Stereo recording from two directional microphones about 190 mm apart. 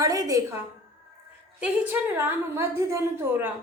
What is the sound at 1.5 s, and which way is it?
A woman's voice, 10° right (ahead or behind).